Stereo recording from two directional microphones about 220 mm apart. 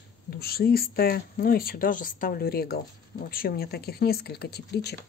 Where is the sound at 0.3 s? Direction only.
45° left (ahead or behind).